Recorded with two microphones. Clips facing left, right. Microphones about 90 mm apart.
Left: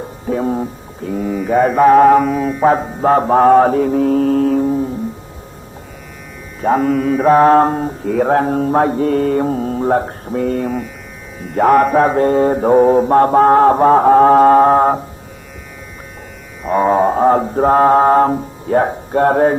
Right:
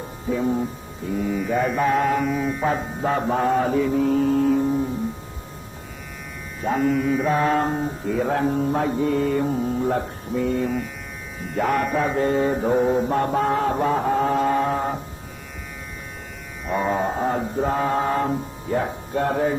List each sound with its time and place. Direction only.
0.3 s mantra: 55° left (ahead or behind)
2.2 s music: centre (ahead or behind)
2.6 s mantra: 50° left (ahead or behind)
6.7 s mantra: 50° left (ahead or behind)
6.9 s music: centre (ahead or behind)
7.2 s mantra: 45° left (ahead or behind)
11.5 s mantra: 50° left (ahead or behind)
16.7 s mantra: 50° left (ahead or behind)